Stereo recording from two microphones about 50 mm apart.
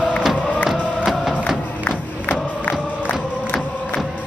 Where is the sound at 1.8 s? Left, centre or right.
Left.